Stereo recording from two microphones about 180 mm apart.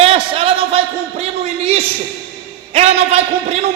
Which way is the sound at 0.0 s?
30° right (ahead or behind).